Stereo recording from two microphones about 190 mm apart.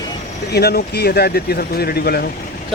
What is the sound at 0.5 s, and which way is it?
Speech, 55° left (ahead or behind).